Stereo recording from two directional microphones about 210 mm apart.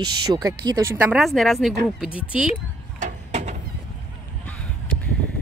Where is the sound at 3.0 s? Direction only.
35° right (ahead or behind).